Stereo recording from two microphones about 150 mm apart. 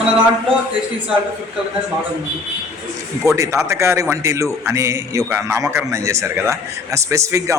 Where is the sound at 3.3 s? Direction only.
20° right (ahead or behind).